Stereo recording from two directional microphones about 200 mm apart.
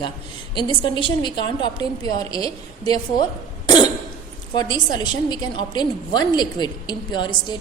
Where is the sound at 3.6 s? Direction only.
20° left (ahead or behind).